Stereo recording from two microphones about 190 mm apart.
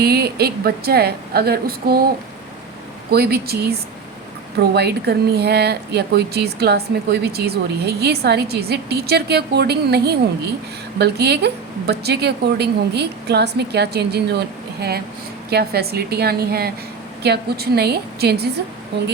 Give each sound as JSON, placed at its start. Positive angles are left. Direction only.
{"t": 0.0, "sound": "speech", "side_deg": -55}
{"t": 3.1, "sound": "speech", "side_deg": -55}